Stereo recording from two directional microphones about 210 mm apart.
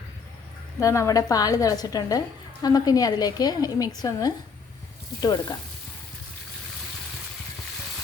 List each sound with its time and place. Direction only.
0.8 s a woman's voice: 15° left (ahead or behind)